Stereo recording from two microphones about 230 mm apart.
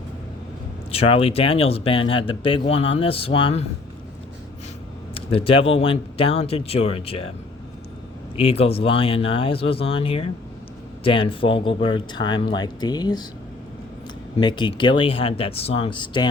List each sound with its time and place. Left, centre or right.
0.9 s speech: left
5.1 s speech: left
8.4 s speech: left
14.3 s speech: left